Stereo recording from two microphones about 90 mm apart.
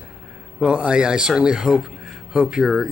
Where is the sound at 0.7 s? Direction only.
10° right (ahead or behind).